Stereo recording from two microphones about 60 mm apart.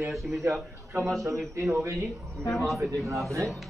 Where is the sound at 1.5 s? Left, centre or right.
Right.